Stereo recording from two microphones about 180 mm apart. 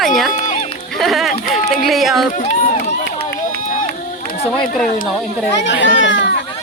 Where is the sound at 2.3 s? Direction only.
50° left (ahead or behind).